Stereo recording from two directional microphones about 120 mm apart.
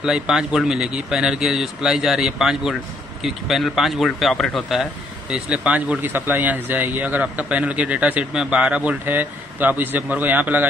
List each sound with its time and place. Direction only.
0.0 s speech: 5° right (ahead or behind)